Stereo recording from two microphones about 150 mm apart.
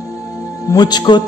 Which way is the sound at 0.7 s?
30° left (ahead or behind).